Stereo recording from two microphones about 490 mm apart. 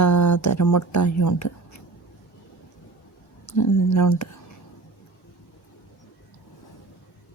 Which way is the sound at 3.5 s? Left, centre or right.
Left.